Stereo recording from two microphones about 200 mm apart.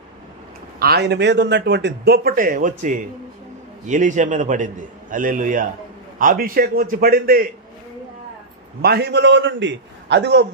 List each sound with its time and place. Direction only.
0.7 s a man's voice: 55° right (ahead or behind)
8.8 s a man's voice: 55° right (ahead or behind)